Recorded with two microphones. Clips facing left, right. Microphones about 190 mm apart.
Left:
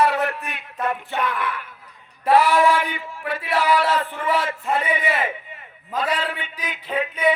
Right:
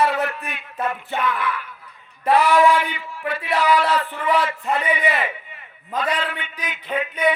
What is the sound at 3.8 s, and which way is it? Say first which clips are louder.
Speech: even; 45° left (ahead or behind).